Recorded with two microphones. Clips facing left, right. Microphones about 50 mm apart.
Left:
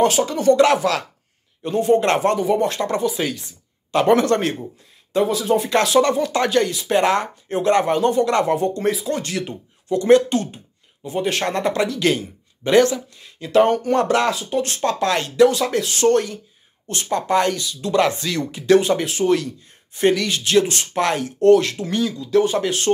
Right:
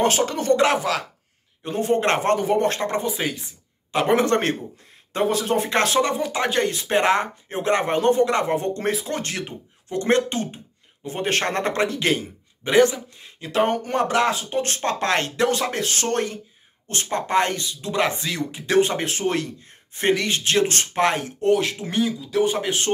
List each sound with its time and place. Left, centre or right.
0.0 s speech: right
3.2 s a man's voice: centre
5.1 s speech: right
6.0 s a man's voice: centre
6.6 s a man's voice: right
8.3 s a man's voice: right
8.5 s speech: right
11.1 s a man's voice: right; by 18.4 s centre
18.8 s speech: right
20.9 s a man's voice: right